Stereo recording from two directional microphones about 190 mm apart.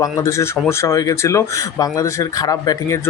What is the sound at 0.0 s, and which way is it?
Speech, 15° left (ahead or behind).